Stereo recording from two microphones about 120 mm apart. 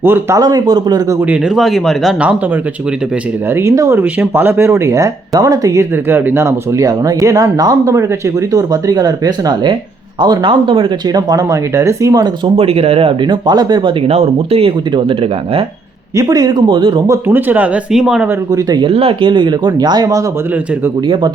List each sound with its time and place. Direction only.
0.0 s speech: 20° right (ahead or behind)
0.3 s speech: 30° right (ahead or behind)
1.3 s speech: 5° right (ahead or behind)
3.5 s speech: 25° right (ahead or behind)
12.5 s speech: 55° right (ahead or behind); by 13.9 s 35° right (ahead or behind)
14.1 s speech: 60° right (ahead or behind)
16.1 s speech: 30° right (ahead or behind)
17.1 s speech: 15° right (ahead or behind)
17.9 s speech: 5° right (ahead or behind)
18.5 s speech: 35° right (ahead or behind)
18.9 s speech: 50° right (ahead or behind); by 20.2 s 30° right (ahead or behind)